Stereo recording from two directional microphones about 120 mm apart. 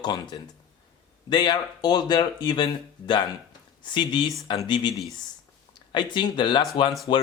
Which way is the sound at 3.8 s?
40° left (ahead or behind).